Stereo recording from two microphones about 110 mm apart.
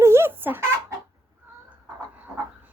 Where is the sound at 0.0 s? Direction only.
25° right (ahead or behind).